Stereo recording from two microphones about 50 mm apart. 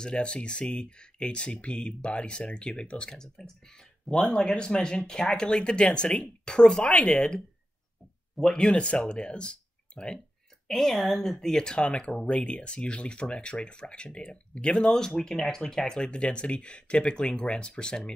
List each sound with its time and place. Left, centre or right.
0.0 s speech: centre
8.4 s speech: centre
10.7 s speech: centre
11.3 s speech: centre